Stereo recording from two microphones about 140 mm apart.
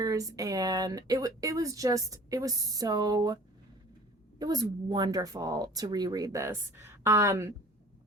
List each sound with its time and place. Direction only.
0.0 s speech: 25° right (ahead or behind)
4.4 s speech: 30° right (ahead or behind)